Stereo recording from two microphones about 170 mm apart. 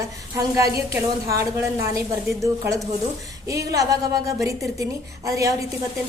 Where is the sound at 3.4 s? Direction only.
20° right (ahead or behind).